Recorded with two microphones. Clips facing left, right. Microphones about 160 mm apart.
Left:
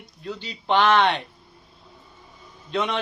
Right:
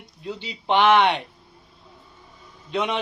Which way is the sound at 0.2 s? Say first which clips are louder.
Right 1 dB; 15° right (ahead or behind).